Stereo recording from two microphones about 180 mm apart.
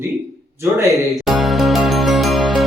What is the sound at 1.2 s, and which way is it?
Music, centre (ahead or behind).